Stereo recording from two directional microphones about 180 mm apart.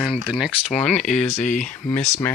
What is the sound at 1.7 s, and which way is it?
Speech, 10° left (ahead or behind).